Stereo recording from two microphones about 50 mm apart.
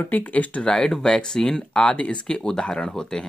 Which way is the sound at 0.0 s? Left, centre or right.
Left.